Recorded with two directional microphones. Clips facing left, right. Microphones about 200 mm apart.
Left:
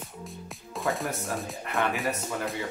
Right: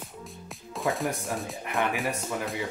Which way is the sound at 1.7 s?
15° right (ahead or behind).